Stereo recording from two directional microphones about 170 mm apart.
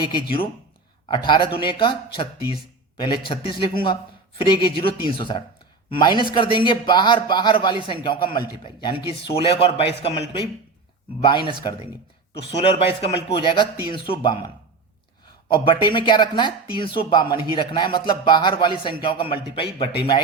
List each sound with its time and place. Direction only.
0.1 s speech: 30° left (ahead or behind)
15.5 s speech: 30° left (ahead or behind)